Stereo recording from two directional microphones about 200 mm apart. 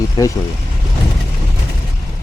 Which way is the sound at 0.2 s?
20° left (ahead or behind).